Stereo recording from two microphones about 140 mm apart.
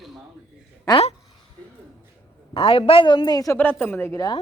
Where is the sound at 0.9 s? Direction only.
40° left (ahead or behind).